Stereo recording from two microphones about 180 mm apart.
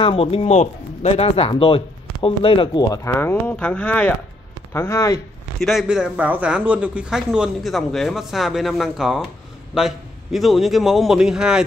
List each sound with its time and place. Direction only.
0.0 s speech: 30° left (ahead or behind)
5.6 s speech: centre (ahead or behind)